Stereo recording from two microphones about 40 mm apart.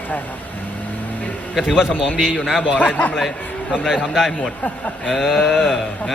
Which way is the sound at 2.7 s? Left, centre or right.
Left.